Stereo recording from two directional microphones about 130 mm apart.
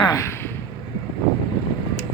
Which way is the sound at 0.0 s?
25° left (ahead or behind).